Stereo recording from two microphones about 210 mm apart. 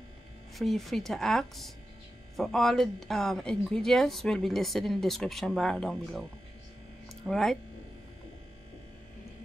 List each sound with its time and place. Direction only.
0.6 s speech: centre (ahead or behind)
7.2 s speech: centre (ahead or behind)